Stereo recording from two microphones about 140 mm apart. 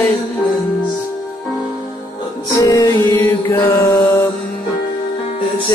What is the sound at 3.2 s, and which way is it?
Mantra, 15° left (ahead or behind).